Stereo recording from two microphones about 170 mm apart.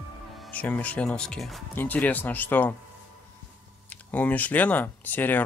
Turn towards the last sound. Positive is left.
turn(degrees=10)  # may be behind; listen again after turning